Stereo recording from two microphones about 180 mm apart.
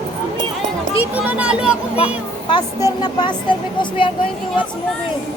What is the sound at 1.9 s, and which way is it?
Speech, 30° left (ahead or behind).